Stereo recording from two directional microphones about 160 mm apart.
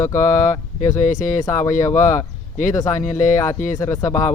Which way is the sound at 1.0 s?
50° left (ahead or behind).